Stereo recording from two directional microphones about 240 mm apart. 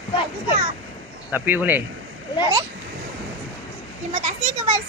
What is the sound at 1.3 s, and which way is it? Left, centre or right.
Speech, centre.